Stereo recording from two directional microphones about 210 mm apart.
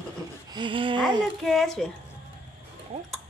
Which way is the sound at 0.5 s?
20° right (ahead or behind).